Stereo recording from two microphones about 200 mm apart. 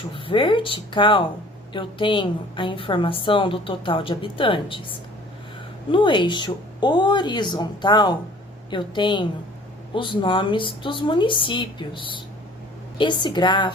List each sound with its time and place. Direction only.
0.1 s a woman's voice: 25° left (ahead or behind)
5.9 s a woman's voice: 25° left (ahead or behind)